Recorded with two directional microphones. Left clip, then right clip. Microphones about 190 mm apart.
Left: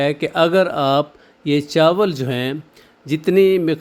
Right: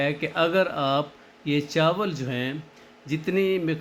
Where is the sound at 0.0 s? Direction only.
50° left (ahead or behind).